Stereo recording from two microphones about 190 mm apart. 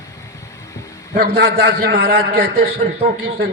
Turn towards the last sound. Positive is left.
turn(degrees=-55)  # may be behind; listen again after turning